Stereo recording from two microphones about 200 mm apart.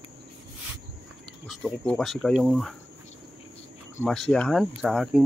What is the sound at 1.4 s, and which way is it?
Speech, centre (ahead or behind).